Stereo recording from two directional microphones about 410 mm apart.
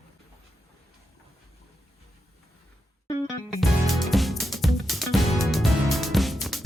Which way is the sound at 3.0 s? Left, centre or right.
Centre.